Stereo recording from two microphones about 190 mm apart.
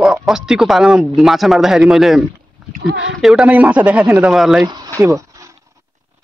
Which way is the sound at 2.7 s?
60° right (ahead or behind).